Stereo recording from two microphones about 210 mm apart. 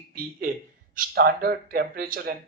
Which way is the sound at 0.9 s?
45° right (ahead or behind).